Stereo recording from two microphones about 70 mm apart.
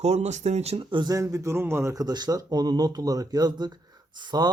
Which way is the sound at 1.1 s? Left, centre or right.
Right.